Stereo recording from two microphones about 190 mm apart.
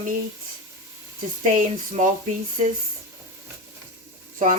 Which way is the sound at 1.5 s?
40° right (ahead or behind).